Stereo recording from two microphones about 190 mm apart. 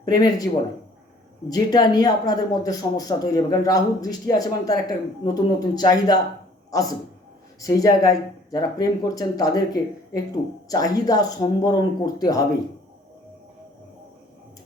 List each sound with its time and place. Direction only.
0.0 s a man's voice: 20° left (ahead or behind)